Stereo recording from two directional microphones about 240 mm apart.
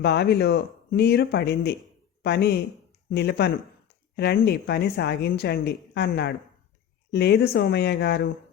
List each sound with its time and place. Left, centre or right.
0.0 s speech: left